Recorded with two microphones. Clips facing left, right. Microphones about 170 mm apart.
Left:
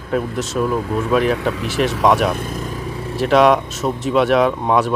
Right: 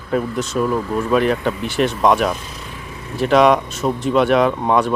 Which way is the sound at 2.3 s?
50° left (ahead or behind).